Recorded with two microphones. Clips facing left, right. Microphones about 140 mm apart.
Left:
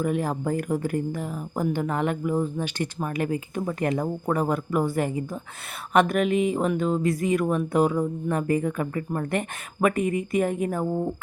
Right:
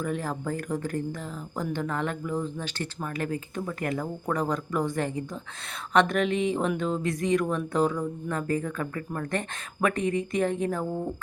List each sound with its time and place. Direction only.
0.0 s speech: 15° left (ahead or behind)
4.3 s speech: 10° left (ahead or behind)